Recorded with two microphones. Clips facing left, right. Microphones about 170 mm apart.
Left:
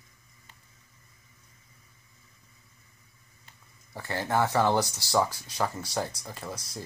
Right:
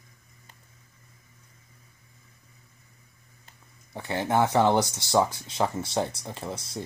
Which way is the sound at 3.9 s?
20° right (ahead or behind).